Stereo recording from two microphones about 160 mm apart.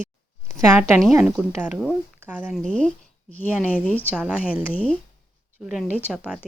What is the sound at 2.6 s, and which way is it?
Speech, 5° left (ahead or behind).